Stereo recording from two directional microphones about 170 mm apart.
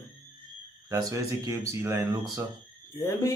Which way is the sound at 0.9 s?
20° right (ahead or behind).